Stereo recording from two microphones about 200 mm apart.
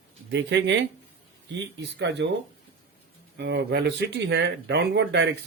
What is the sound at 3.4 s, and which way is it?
Speech, 55° right (ahead or behind).